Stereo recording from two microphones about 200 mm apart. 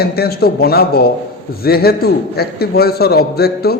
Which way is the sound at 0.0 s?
50° left (ahead or behind).